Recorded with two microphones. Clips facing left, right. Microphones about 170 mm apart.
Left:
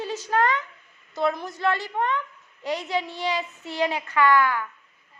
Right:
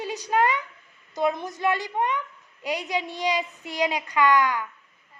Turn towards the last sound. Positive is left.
turn(degrees=-15)  # may be behind; listen again after turning